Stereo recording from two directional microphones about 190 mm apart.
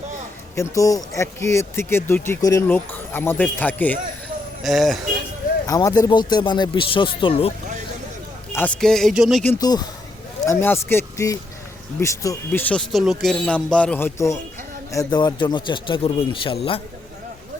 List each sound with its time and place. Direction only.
0.5 s speech: 15° left (ahead or behind)
4.6 s music: centre (ahead or behind)
5.6 s speech: 20° left (ahead or behind)
8.5 s music: 5° left (ahead or behind)
9.4 s speech: 15° left (ahead or behind)